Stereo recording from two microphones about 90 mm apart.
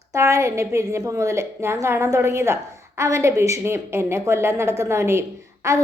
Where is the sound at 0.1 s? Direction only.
35° right (ahead or behind).